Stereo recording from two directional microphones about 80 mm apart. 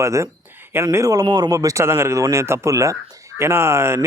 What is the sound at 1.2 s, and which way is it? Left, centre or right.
Speech, right.